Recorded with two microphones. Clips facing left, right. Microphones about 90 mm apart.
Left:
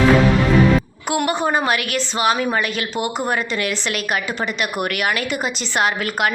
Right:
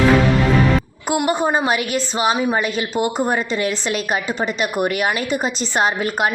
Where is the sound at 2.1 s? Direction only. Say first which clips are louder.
Even; 20° right (ahead or behind).